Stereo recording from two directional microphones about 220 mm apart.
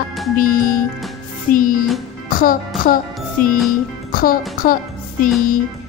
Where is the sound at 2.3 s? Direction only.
40° left (ahead or behind).